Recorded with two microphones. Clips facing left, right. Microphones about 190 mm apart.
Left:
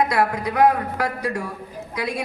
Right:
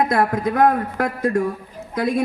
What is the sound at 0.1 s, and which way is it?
Speech, 50° right (ahead or behind).